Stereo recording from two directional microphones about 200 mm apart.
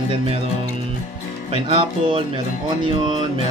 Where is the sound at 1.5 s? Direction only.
25° right (ahead or behind).